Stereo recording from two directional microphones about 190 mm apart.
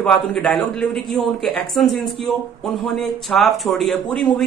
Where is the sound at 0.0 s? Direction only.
5° left (ahead or behind).